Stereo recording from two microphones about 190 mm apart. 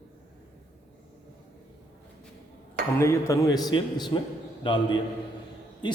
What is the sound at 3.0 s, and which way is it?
A man's voice, 15° left (ahead or behind).